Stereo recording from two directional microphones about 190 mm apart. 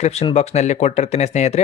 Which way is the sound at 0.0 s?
35° left (ahead or behind).